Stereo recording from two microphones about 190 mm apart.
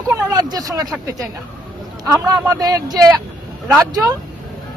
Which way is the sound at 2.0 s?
15° right (ahead or behind).